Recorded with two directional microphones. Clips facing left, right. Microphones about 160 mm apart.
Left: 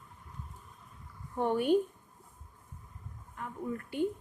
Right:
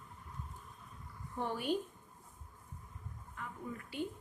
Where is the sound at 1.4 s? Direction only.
55° left (ahead or behind).